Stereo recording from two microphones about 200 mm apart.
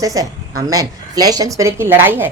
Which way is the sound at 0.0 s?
15° right (ahead or behind).